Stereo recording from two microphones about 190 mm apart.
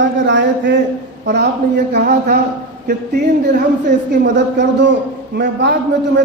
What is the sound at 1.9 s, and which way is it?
Speech, 50° right (ahead or behind).